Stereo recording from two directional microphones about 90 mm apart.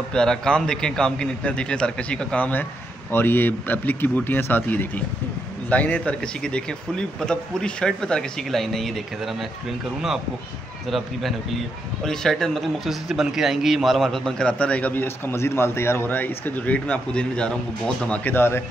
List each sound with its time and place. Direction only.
0.1 s a man's voice: 5° left (ahead or behind); by 18.6 s 25° left (ahead or behind)